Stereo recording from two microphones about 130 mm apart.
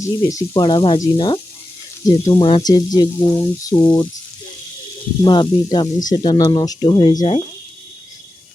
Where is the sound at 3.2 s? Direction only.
20° left (ahead or behind).